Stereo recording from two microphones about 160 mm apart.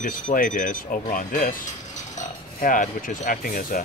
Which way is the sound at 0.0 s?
60° left (ahead or behind).